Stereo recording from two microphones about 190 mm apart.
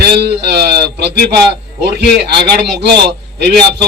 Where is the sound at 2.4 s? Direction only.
60° right (ahead or behind).